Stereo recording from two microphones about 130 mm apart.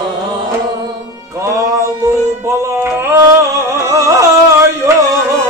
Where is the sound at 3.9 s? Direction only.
25° right (ahead or behind).